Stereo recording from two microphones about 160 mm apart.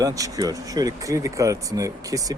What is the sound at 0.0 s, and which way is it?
Speech, 20° right (ahead or behind).